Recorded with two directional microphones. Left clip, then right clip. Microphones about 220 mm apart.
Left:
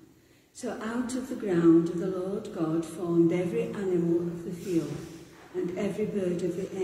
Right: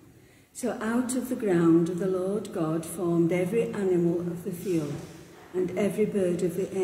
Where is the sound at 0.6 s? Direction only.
45° right (ahead or behind).